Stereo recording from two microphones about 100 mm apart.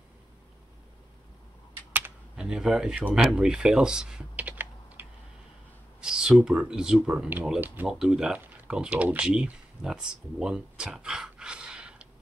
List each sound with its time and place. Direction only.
2.3 s speech: 5° right (ahead or behind)
5.9 s speech: 5° right (ahead or behind)
8.0 s speech: 5° right (ahead or behind)